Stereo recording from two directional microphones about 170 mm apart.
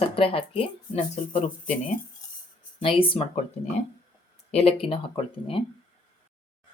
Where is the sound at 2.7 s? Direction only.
30° left (ahead or behind).